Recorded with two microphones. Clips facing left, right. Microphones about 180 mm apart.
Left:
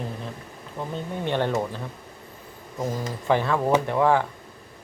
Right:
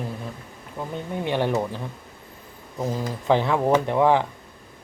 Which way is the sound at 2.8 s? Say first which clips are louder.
Right 2 dB; 15° right (ahead or behind).